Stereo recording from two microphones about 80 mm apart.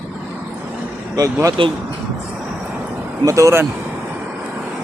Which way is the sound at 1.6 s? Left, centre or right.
Right.